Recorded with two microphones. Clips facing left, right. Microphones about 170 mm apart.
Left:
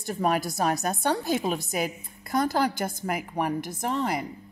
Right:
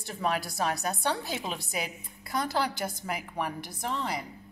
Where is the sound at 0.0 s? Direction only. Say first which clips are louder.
Left 5 dB; 45° left (ahead or behind).